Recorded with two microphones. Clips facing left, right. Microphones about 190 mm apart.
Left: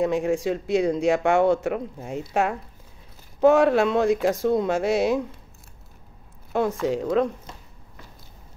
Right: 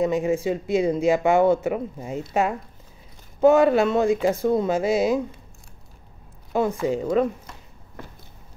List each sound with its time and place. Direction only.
0.0 s speech: centre (ahead or behind)
6.5 s speech: centre (ahead or behind)
8.0 s a sound: 55° right (ahead or behind)